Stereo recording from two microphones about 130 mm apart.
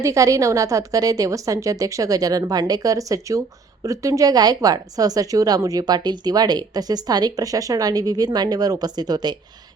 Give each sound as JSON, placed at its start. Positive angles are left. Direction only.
{"t": 0.0, "sound": "a woman's voice", "side_deg": -25}